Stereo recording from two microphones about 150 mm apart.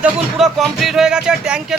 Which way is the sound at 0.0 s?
Centre (ahead or behind).